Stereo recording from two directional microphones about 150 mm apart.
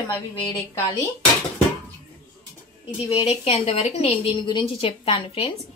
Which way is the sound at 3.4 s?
45° left (ahead or behind).